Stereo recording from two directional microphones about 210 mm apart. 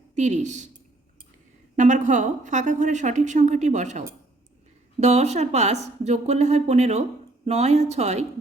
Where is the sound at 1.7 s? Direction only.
35° right (ahead or behind).